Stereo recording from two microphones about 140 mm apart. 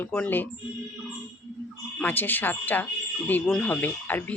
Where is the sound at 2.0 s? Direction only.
15° left (ahead or behind).